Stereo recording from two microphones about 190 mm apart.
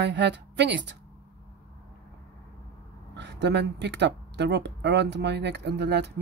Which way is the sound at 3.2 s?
65° right (ahead or behind).